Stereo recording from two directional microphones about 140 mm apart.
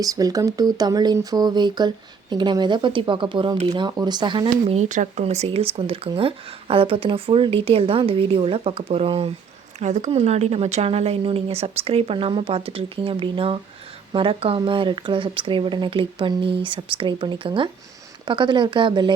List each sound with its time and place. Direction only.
0.0 s speech: 25° right (ahead or behind)
4.7 s a woman's voice: 60° right (ahead or behind); by 9.3 s 40° right (ahead or behind)
9.8 s a woman's voice: 55° right (ahead or behind); by 19.1 s 35° right (ahead or behind)